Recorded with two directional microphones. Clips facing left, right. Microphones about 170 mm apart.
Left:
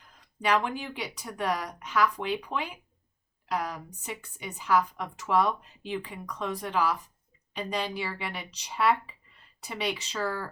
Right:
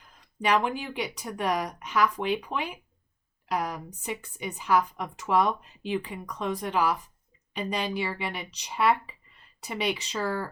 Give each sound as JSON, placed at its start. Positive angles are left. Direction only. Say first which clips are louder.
{"t": 0.4, "sound": "a woman's voice", "louder": "right 2 dB", "side_deg": -20}